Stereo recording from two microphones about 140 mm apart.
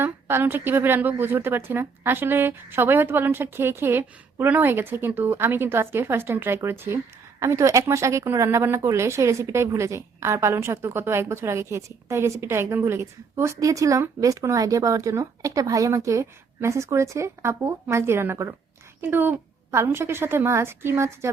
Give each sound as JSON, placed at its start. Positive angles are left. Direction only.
{"t": 0.0, "sound": "speech", "side_deg": -15}